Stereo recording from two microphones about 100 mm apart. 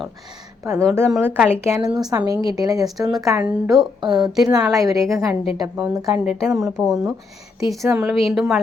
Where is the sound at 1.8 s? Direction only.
40° right (ahead or behind).